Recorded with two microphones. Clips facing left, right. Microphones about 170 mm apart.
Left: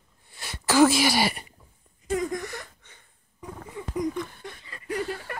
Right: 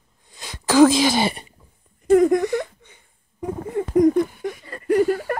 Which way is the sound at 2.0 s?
60° right (ahead or behind).